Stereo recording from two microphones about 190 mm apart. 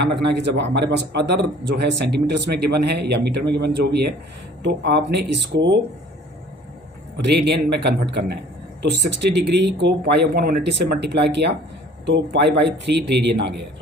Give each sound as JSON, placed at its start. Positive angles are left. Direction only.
{"t": 0.0, "sound": "a man's voice", "side_deg": -65}
{"t": 7.2, "sound": "a man's voice", "side_deg": -65}